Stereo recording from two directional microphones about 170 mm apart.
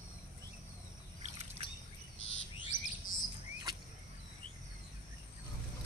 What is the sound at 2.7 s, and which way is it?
Bird, 50° left (ahead or behind).